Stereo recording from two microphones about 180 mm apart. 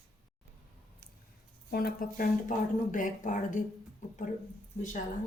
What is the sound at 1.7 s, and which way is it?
Speech, 55° left (ahead or behind).